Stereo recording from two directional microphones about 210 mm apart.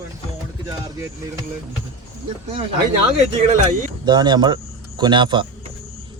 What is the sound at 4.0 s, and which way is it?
Speech, 20° right (ahead or behind).